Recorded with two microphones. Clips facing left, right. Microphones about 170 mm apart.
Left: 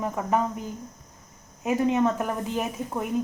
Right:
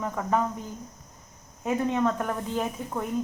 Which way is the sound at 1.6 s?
20° left (ahead or behind).